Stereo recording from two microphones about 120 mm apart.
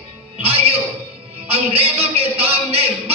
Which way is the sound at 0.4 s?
55° right (ahead or behind).